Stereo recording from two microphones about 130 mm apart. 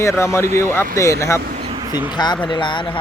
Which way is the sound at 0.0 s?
20° left (ahead or behind).